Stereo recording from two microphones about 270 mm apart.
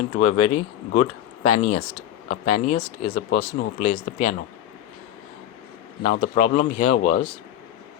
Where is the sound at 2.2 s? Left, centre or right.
Left.